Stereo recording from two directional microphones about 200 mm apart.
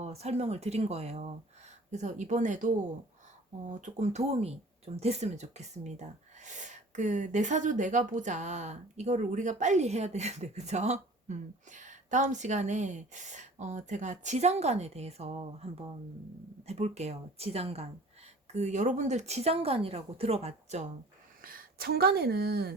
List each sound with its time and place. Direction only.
0.0 s speech: 30° right (ahead or behind)
21.4 s a woman's voice: 45° right (ahead or behind)